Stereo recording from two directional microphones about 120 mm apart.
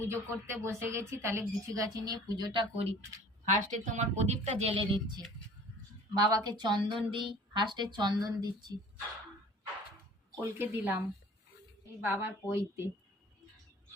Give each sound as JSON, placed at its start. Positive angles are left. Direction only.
{"t": 0.0, "sound": "a woman's voice", "side_deg": -20}
{"t": 3.5, "sound": "speech", "side_deg": -90}
{"t": 4.7, "sound": "a woman's voice", "side_deg": -40}
{"t": 10.4, "sound": "a woman's voice", "side_deg": -20}
{"t": 12.0, "sound": "a woman's voice", "side_deg": -20}